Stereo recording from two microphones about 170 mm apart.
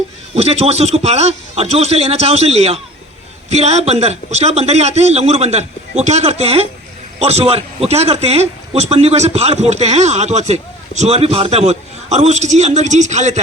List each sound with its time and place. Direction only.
0.3 s a man's voice: 35° right (ahead or behind)